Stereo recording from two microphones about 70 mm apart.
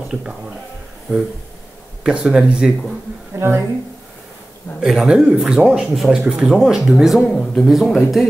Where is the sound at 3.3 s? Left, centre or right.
Right.